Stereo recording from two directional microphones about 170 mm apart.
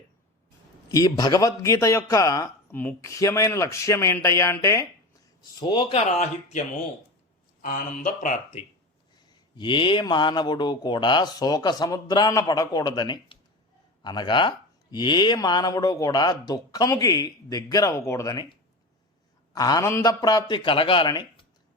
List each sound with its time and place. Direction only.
0.9 s speech: 20° left (ahead or behind)
5.5 s speech: 25° left (ahead or behind)
7.6 s speech: 50° left (ahead or behind)
9.6 s speech: 30° left (ahead or behind)
19.5 s speech: 20° left (ahead or behind)